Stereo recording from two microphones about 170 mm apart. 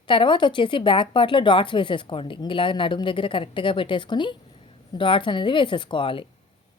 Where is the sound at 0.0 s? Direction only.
30° left (ahead or behind).